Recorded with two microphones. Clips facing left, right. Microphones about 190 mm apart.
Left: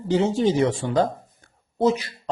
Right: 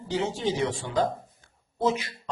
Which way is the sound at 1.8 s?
35° left (ahead or behind).